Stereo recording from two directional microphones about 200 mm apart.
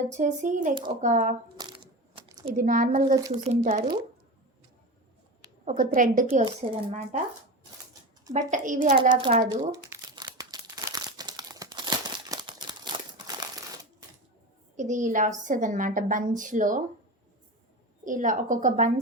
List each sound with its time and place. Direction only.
0.0 s a woman's voice: 35° right (ahead or behind)
0.7 s a woman's voice: 25° right (ahead or behind)
1.0 s a woman's voice: 40° right (ahead or behind)
1.5 s a sound: 20° right (ahead or behind)
2.5 s a woman's voice: 45° right (ahead or behind)
5.6 s a woman's voice: 40° right (ahead or behind)
8.3 s a woman's voice: 40° right (ahead or behind)
9.1 s a woman's voice: 30° right (ahead or behind)
9.5 s crumpling: 20° right (ahead or behind)
14.8 s a woman's voice: 40° right (ahead or behind)
18.0 s a woman's voice: 40° right (ahead or behind)